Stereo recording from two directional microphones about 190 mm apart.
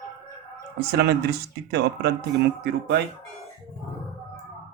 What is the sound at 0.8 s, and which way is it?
A man's voice, 60° right (ahead or behind).